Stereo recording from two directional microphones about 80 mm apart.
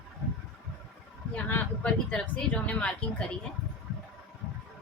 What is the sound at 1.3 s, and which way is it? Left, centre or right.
Speech, centre.